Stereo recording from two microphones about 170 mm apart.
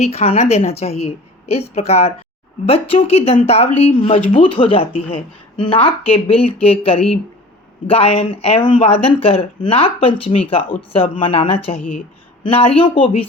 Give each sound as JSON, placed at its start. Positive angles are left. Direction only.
{"t": 0.0, "sound": "speech", "side_deg": 40}